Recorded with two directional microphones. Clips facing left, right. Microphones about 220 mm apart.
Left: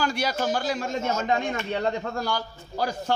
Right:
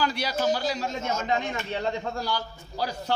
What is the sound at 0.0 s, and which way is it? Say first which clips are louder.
A man's voice: even; 45° left (ahead or behind).